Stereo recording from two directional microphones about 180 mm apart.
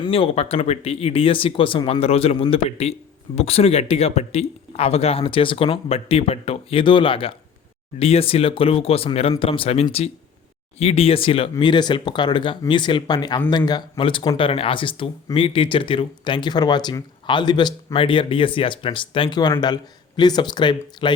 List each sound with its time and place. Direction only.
0.0 s speech: 30° left (ahead or behind)